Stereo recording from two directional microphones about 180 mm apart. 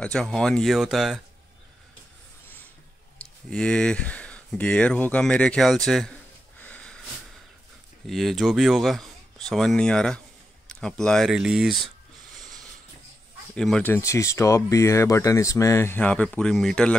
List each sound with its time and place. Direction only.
0.0 s speech: 5° left (ahead or behind)
3.4 s speech: 5° left (ahead or behind)
6.6 s wheeze: 5° left (ahead or behind)
8.1 s speech: centre (ahead or behind)
13.6 s speech: 5° left (ahead or behind)